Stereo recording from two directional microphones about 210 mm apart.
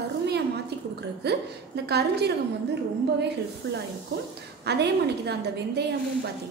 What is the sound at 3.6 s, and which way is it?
A woman's voice, 55° right (ahead or behind).